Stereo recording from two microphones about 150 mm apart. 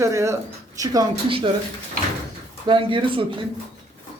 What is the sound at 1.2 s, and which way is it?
Speech, 35° right (ahead or behind).